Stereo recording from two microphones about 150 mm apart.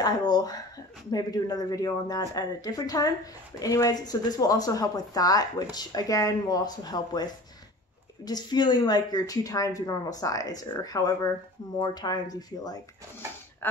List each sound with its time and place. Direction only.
0.0 s a woman's voice: 25° left (ahead or behind)
8.3 s a woman's voice: 25° left (ahead or behind)